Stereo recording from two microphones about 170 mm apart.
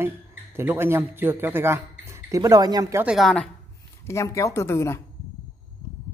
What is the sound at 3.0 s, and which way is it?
Speech, centre (ahead or behind).